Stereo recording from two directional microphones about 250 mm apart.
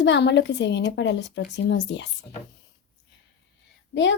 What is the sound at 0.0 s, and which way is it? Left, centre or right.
Speech, left.